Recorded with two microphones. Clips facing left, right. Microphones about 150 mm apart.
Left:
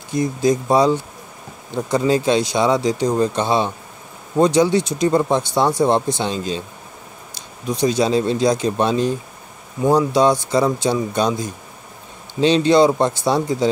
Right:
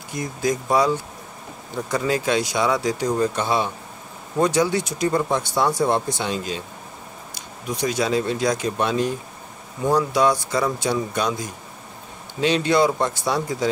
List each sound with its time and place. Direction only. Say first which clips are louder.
0.1 s speech: left 6 dB; 25° left (ahead or behind)
7.6 s speech: left 5 dB; 25° left (ahead or behind)